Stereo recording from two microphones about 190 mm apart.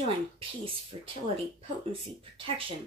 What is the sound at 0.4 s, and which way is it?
Speech, 30° right (ahead or behind).